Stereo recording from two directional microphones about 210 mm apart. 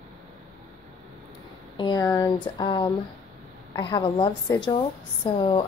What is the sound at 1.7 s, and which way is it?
Speech, 20° left (ahead or behind).